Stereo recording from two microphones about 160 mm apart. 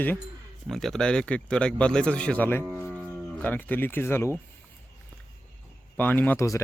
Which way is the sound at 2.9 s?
10° left (ahead or behind).